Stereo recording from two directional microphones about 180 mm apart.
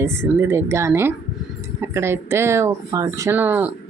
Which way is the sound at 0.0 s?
15° right (ahead or behind).